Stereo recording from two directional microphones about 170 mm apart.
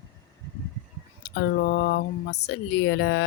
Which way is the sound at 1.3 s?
85° left.